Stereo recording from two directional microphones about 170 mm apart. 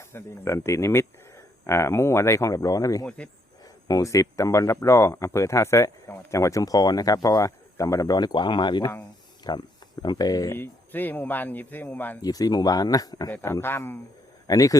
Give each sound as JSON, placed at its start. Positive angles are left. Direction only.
{"t": 0.1, "sound": "speech", "side_deg": 15}
{"t": 12.2, "sound": "speech", "side_deg": 20}